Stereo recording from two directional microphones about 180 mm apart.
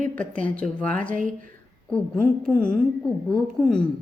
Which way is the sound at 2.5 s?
5° left (ahead or behind).